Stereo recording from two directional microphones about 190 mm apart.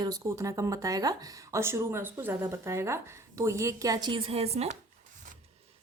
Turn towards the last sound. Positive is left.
turn(degrees=-35)  # may be behind; listen again after turning